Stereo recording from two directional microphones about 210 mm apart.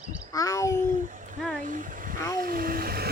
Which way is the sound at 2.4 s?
45° right (ahead or behind).